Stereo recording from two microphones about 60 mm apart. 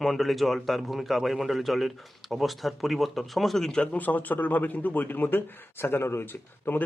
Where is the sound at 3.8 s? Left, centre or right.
Left.